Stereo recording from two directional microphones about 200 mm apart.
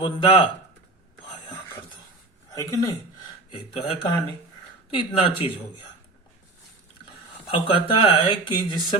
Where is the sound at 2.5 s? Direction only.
15° left (ahead or behind).